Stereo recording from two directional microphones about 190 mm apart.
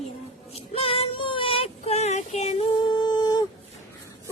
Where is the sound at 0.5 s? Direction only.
30° left (ahead or behind).